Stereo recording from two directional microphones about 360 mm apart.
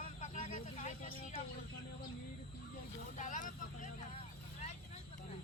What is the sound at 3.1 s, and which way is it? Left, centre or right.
Vehicle, left.